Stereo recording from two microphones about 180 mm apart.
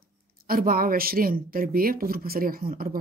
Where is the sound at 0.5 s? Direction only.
55° right (ahead or behind).